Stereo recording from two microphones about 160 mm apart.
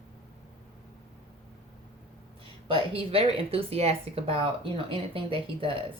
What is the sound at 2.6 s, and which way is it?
A woman's voice, 35° right (ahead or behind).